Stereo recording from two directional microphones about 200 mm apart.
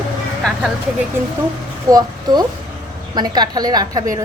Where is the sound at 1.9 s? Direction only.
20° right (ahead or behind).